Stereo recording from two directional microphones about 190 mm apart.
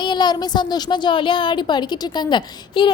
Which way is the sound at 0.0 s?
20° left (ahead or behind).